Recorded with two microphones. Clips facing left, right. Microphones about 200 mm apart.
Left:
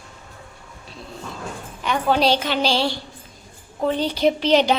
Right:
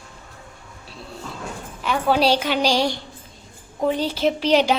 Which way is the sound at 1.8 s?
5° right (ahead or behind).